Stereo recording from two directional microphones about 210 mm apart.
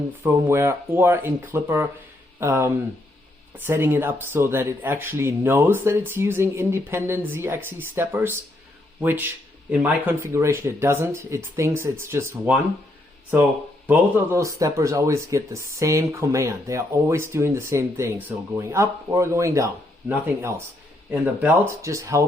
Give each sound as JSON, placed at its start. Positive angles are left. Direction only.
{"t": 0.2, "sound": "speech", "side_deg": -10}
{"t": 13.8, "sound": "speech", "side_deg": -10}